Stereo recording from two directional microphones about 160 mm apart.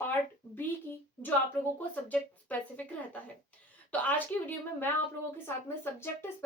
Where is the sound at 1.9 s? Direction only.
10° left (ahead or behind).